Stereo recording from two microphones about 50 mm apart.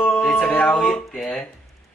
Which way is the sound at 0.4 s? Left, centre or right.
Left.